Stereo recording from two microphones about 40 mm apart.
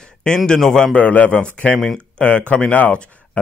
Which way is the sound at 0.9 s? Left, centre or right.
Left.